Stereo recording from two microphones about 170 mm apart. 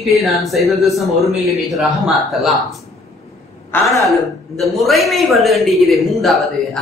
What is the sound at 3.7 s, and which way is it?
Speech, 15° left (ahead or behind).